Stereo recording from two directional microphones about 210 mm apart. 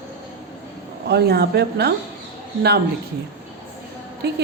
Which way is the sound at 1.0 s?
50° right (ahead or behind).